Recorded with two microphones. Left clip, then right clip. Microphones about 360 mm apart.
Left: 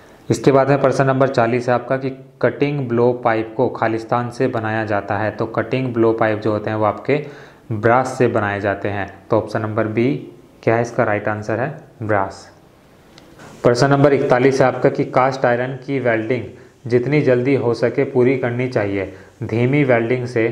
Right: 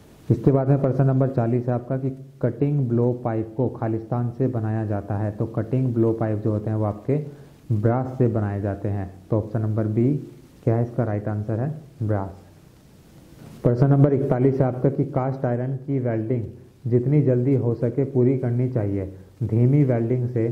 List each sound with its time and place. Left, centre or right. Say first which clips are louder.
0.3 s speech: left 8 dB; centre
3.5 s speech: left 8 dB; centre
3.8 s speech: left 9 dB; centre
13.6 s speech: left 8 dB; centre